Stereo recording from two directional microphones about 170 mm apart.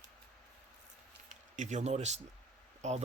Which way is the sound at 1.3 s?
45° right (ahead or behind).